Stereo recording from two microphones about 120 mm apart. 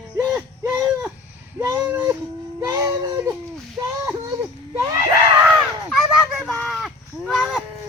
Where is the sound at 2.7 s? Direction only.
30° right (ahead or behind).